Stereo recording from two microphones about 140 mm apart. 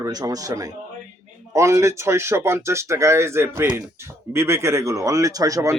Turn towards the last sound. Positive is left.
turn(degrees=-25)  # may be behind; listen again after turning